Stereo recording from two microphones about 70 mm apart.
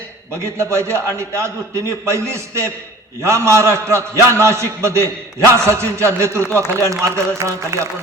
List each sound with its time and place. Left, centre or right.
0.6 s a man's voice: right